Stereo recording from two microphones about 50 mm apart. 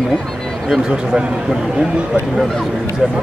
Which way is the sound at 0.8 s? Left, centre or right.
Centre.